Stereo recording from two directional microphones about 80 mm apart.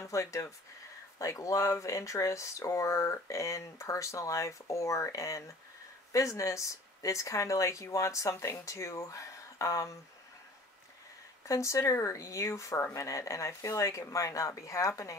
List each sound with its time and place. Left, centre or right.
0.0 s speech: left
11.4 s speech: left